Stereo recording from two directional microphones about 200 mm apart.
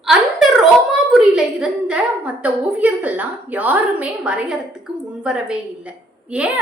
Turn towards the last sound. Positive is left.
turn(degrees=-5)  # may be behind; listen again after turning